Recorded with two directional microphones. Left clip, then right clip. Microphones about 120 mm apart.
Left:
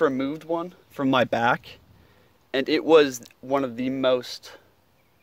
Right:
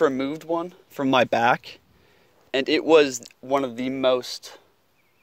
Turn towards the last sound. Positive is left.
turn(degrees=-30)  # may be behind; listen again after turning